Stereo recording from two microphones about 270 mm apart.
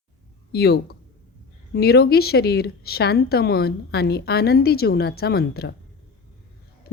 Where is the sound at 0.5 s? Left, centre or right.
Left.